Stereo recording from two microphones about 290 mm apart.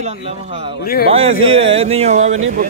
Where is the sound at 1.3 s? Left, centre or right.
Right.